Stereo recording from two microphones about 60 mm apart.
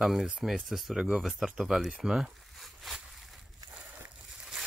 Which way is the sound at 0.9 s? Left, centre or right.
Centre.